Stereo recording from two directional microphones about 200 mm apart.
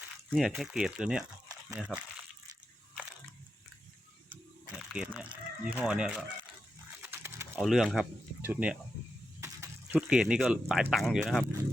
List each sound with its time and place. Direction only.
0.3 s speech: centre (ahead or behind)
4.7 s speech: 5° right (ahead or behind)
7.0 s typing: 10° right (ahead or behind)
7.5 s speech: centre (ahead or behind)
9.4 s a sound: 15° right (ahead or behind)
10.1 s speech: 5° right (ahead or behind)